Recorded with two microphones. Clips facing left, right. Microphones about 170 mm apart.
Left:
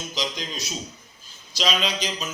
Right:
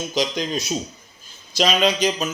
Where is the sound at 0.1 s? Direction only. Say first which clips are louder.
Right 9 dB; 55° right (ahead or behind).